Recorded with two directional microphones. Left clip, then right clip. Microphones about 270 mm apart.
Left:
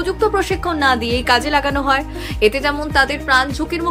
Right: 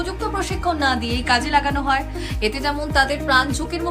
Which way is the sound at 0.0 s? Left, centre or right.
Centre.